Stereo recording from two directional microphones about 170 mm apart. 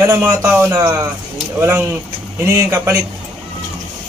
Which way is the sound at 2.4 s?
15° right (ahead or behind).